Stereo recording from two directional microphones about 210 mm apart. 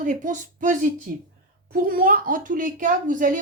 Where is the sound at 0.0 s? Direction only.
35° right (ahead or behind).